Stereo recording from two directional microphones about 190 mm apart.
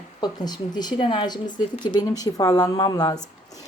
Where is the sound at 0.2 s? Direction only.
20° left (ahead or behind).